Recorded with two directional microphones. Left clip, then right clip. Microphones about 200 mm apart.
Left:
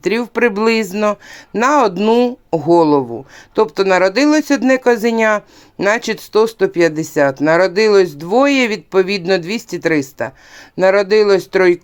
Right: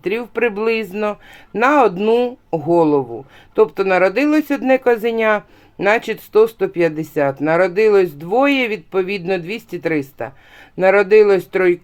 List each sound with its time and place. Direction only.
0.0 s speech: 30° left (ahead or behind)